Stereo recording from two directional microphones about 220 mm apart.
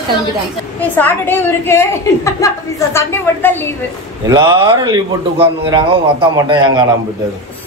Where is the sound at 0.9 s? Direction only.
10° left (ahead or behind).